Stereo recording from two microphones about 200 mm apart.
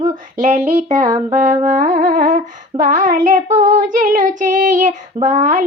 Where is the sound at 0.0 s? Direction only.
40° right (ahead or behind).